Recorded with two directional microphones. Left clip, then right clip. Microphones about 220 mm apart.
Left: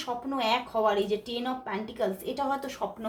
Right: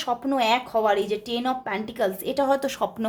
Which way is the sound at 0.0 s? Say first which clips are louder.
Right 7 dB; 45° right (ahead or behind).